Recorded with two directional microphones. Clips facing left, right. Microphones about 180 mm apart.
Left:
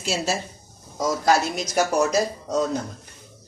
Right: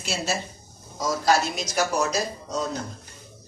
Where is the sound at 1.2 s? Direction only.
50° left (ahead or behind).